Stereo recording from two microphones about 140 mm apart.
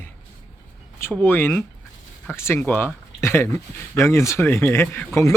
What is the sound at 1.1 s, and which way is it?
Speech, 15° left (ahead or behind).